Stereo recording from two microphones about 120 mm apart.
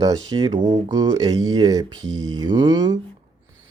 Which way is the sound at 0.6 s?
65° right (ahead or behind).